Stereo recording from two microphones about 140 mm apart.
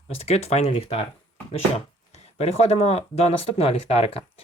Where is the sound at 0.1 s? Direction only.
50° left (ahead or behind).